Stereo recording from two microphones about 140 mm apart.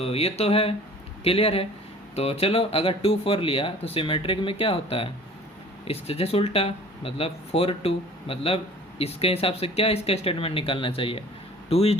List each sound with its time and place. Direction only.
0.0 s speech: 45° left (ahead or behind)